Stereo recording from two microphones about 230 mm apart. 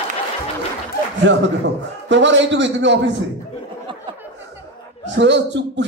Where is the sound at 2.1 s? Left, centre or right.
Right.